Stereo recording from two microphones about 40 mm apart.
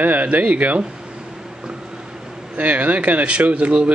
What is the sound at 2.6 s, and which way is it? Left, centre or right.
Speech, right.